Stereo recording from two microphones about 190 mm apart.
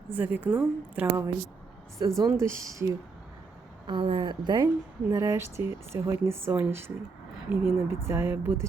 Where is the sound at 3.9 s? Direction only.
25° right (ahead or behind).